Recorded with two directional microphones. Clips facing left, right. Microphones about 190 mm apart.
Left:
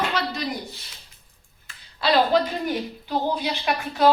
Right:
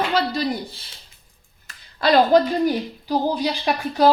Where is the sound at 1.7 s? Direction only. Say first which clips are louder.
Right 4 dB; 50° right (ahead or behind).